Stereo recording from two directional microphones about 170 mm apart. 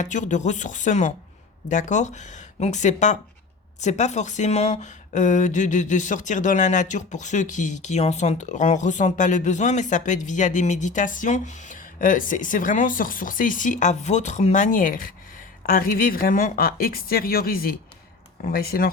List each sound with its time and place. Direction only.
0.0 s a woman's voice: 45° left (ahead or behind); by 18.9 s 60° left (ahead or behind)